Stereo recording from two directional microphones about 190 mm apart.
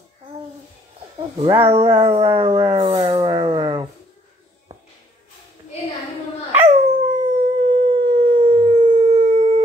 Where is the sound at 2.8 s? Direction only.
30° right (ahead or behind).